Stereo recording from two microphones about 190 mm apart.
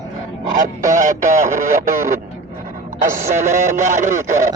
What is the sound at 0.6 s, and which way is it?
Speech, 40° right (ahead or behind).